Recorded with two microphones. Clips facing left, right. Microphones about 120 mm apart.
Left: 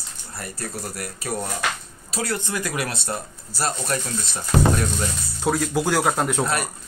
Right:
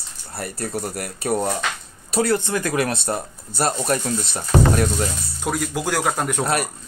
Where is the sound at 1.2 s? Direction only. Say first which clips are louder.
Right 7 dB; 30° right (ahead or behind).